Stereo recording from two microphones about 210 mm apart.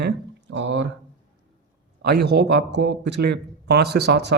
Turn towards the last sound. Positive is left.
turn(degrees=-50)  # may be behind; listen again after turning